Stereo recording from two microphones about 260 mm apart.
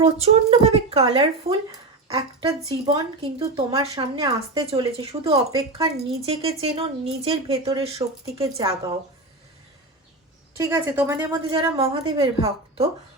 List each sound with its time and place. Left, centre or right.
0.0 s a woman's voice: right
8.4 s a woman's voice: centre
10.6 s a woman's voice: centre